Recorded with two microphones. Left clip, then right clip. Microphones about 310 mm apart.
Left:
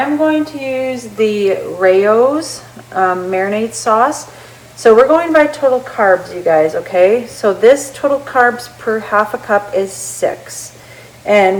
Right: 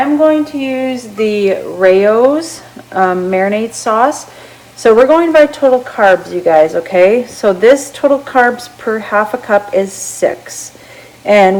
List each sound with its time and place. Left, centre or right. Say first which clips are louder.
0.2 s a woman's voice: right 4 dB; right